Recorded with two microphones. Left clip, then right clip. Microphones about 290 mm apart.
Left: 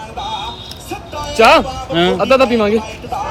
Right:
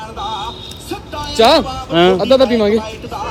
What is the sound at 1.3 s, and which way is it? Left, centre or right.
Speech, right.